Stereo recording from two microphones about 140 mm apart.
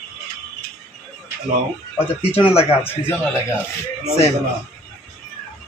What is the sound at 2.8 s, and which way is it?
Speech, 15° left (ahead or behind).